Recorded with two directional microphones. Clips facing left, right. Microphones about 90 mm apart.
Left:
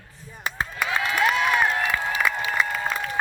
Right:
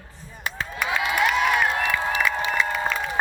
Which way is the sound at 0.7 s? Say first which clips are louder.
Right 1 dB; 10° right (ahead or behind).